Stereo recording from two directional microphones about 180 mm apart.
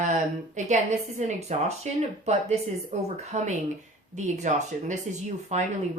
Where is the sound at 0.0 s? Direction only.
45° right (ahead or behind).